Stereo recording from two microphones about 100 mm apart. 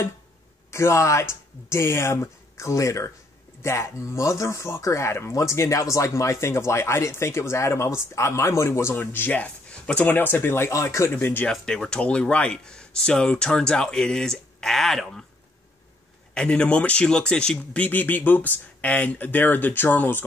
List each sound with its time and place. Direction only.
0.7 s speech: 30° left (ahead or behind)
11.5 s speech: 5° left (ahead or behind)
16.3 s speech: 10° left (ahead or behind)